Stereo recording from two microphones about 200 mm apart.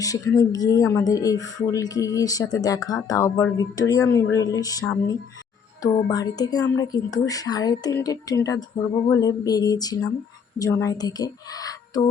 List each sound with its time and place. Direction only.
0.0 s speech: 20° left (ahead or behind)